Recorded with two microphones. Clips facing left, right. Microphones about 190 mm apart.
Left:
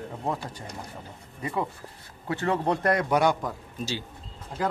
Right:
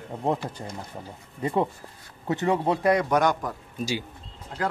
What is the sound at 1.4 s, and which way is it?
Speech, 35° right (ahead or behind).